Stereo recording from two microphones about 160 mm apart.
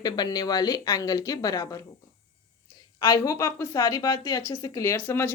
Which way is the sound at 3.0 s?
20° left (ahead or behind).